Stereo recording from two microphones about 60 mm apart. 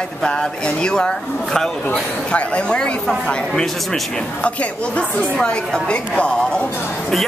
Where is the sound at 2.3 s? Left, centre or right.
Left.